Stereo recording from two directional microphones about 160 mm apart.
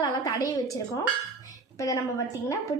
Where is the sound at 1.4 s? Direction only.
20° left (ahead or behind).